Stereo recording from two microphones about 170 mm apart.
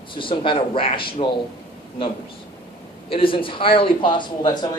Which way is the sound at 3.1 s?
30° left (ahead or behind).